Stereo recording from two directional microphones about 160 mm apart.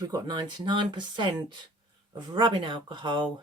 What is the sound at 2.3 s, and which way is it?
Speech, 30° right (ahead or behind).